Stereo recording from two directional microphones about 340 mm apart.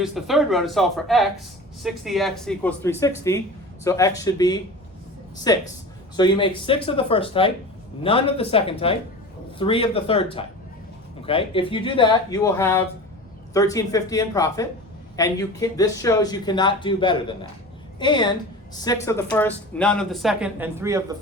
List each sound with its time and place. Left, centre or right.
0.0 s a woman's voice: centre